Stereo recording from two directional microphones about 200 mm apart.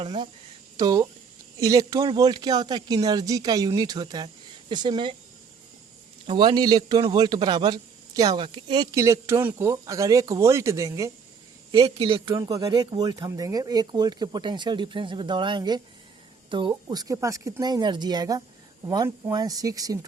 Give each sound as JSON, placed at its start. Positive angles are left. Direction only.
{"t": 0.0, "sound": "a man's voice", "side_deg": -25}
{"t": 6.2, "sound": "a man's voice", "side_deg": -25}
{"t": 11.7, "sound": "a man's voice", "side_deg": -30}